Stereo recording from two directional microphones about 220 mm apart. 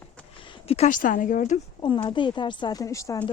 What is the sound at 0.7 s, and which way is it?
Speech, 35° left (ahead or behind).